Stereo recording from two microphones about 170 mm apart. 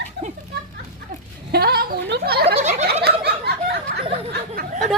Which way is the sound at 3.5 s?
70° right (ahead or behind).